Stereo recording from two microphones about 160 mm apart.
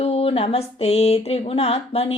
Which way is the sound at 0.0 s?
40° left (ahead or behind).